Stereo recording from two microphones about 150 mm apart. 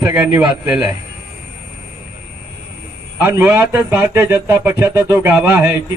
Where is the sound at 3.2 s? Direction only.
15° right (ahead or behind).